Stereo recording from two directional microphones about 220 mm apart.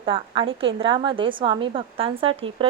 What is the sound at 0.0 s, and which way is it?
Speech, 25° right (ahead or behind).